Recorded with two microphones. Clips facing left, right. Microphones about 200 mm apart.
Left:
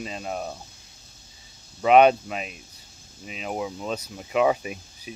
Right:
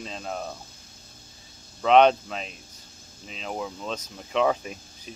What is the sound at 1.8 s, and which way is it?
Speech, 10° left (ahead or behind).